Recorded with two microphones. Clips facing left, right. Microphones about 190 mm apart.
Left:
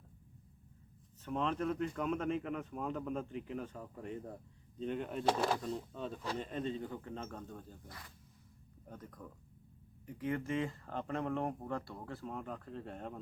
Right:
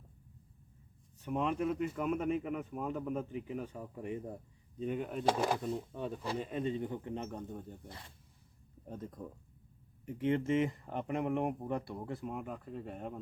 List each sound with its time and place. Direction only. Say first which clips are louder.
1.2 s speech: right 2 dB; 10° right (ahead or behind)